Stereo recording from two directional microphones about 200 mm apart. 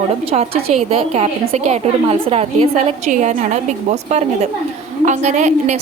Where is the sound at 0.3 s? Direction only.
30° right (ahead or behind).